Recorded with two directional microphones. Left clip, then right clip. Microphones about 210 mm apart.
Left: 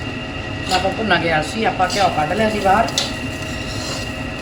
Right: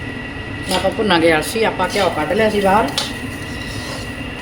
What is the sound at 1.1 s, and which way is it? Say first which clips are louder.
Speech: right 4 dB; 60° right (ahead or behind).